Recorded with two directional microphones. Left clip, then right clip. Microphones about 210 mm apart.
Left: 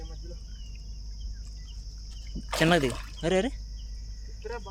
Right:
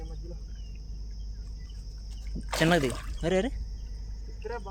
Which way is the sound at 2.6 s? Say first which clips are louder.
Left 1 dB; 10° left (ahead or behind).